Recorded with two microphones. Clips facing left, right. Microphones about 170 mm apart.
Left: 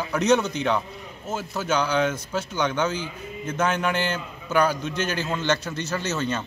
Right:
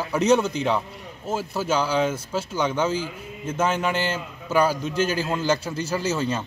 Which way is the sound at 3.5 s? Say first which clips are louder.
Right 1 dB; 5° right (ahead or behind).